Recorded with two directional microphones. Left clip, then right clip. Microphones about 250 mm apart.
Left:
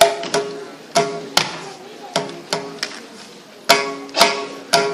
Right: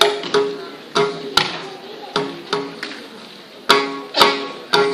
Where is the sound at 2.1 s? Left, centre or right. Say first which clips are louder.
Right 1 dB; left.